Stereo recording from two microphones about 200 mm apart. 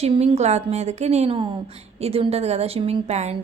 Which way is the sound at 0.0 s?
30° right (ahead or behind).